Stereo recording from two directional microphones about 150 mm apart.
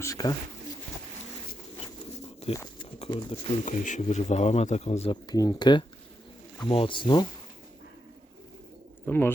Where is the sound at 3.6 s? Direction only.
55° left (ahead or behind).